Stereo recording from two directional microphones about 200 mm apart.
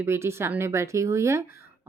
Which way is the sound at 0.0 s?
10° right (ahead or behind).